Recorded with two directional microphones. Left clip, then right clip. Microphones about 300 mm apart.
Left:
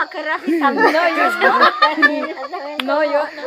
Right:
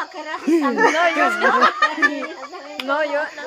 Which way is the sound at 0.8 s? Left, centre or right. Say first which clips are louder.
Left 2 dB; left.